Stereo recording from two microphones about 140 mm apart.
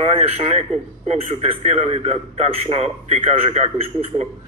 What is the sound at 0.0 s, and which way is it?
A man's voice, 50° right (ahead or behind).